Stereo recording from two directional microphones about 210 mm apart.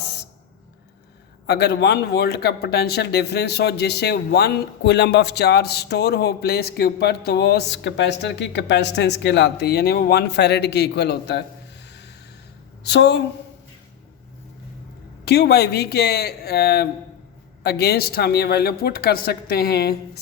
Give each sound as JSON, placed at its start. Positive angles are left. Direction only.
{"t": 1.5, "sound": "a woman's voice", "side_deg": 50}
{"t": 15.2, "sound": "speech", "side_deg": 50}